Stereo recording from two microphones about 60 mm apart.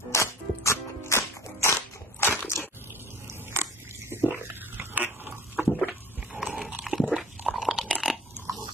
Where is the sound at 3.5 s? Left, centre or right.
Right.